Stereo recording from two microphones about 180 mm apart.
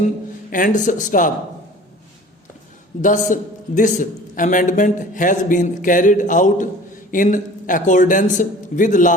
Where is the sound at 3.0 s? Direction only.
45° left (ahead or behind).